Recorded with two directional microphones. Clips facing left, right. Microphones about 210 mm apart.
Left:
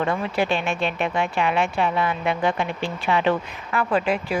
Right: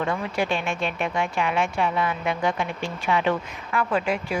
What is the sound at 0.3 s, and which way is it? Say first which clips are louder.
Speech: left 3 dB; 30° left (ahead or behind).